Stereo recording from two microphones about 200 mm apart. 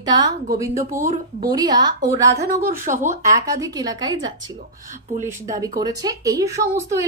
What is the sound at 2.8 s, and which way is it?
Speech, 40° right (ahead or behind).